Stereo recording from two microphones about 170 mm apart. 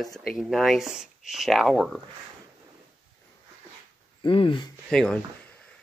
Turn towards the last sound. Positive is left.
turn(degrees=5)  # may be behind; listen again after turning